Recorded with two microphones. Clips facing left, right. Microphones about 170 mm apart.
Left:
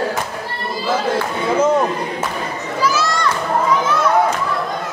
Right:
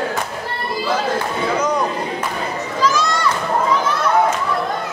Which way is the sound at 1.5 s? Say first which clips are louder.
Left 6 dB; 25° left (ahead or behind).